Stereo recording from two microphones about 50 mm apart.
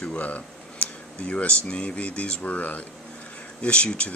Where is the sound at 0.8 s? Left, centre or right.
Left.